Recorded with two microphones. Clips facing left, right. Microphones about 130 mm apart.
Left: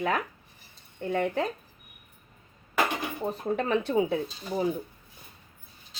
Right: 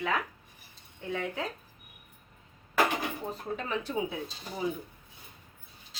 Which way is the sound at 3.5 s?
65° left (ahead or behind).